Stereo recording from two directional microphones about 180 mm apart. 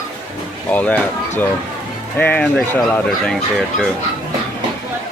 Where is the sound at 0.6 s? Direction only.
10° left (ahead or behind).